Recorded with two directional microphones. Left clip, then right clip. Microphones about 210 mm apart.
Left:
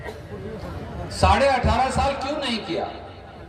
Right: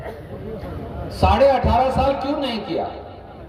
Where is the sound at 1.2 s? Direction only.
50° right (ahead or behind).